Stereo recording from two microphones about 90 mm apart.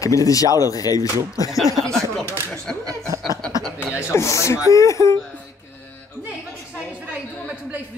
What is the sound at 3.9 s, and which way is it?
Speech, 30° left (ahead or behind).